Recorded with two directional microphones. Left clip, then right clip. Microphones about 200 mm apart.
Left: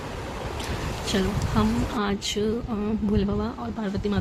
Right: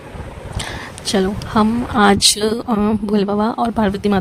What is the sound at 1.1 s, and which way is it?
A woman's voice, 45° right (ahead or behind).